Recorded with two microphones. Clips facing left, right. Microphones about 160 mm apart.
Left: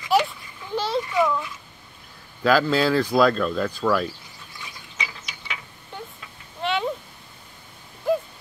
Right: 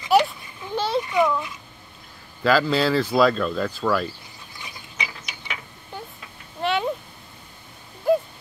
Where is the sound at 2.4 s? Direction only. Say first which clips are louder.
Even; centre (ahead or behind).